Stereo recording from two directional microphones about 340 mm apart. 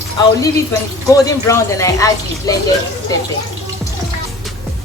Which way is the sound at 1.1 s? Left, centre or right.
Centre.